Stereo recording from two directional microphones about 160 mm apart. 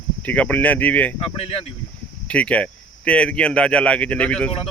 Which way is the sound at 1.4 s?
35° left (ahead or behind).